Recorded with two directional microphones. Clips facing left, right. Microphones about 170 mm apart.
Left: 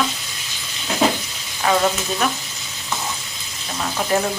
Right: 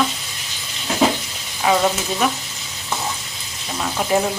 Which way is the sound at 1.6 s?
5° right (ahead or behind).